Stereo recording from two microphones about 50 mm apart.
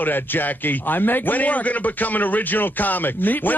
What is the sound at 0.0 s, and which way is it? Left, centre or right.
A man's voice, left.